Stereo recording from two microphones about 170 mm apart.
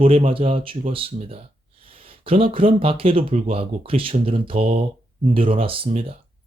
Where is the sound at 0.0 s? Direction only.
35° right (ahead or behind).